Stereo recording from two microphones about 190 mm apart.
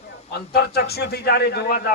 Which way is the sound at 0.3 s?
60° left (ahead or behind).